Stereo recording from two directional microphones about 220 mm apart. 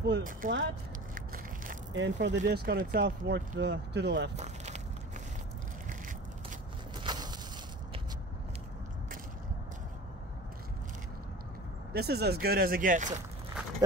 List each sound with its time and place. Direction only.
0.0 s speech: 45° right (ahead or behind)
1.1 s crushing: 40° right (ahead or behind)
2.0 s speech: 55° right (ahead or behind)
7.0 s a sound: 20° right (ahead or behind)
11.9 s speech: 45° right (ahead or behind)